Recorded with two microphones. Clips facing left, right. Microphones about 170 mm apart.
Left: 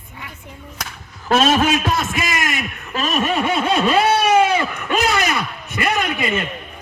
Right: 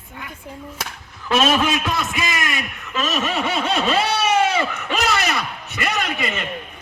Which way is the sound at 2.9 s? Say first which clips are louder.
Left 3 dB; 50° left (ahead or behind).